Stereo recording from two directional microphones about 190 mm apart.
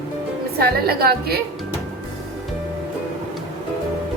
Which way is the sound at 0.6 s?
55° right (ahead or behind).